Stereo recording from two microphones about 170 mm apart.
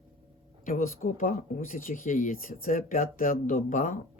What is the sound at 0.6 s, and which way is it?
Speech, 55° left (ahead or behind).